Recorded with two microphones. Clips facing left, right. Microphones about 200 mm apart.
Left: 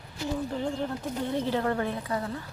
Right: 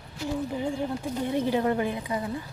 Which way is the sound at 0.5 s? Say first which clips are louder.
Right 1 dB; 10° right (ahead or behind).